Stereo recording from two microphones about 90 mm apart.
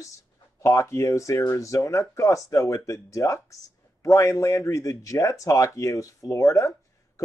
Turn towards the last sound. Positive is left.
turn(degrees=40)  # may be behind; listen again after turning